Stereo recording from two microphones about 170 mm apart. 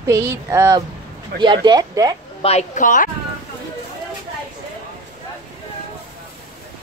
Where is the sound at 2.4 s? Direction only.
45° left (ahead or behind).